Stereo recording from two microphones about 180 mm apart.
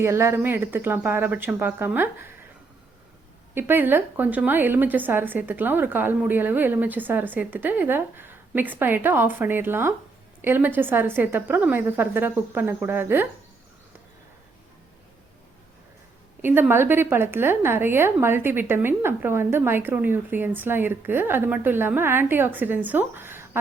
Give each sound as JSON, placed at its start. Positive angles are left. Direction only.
{"t": 0.0, "sound": "a woman's voice", "side_deg": -15}
{"t": 3.5, "sound": "a woman's voice", "side_deg": -10}
{"t": 16.4, "sound": "a woman's voice", "side_deg": -10}